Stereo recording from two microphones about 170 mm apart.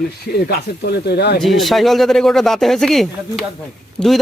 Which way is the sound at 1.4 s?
Centre (ahead or behind).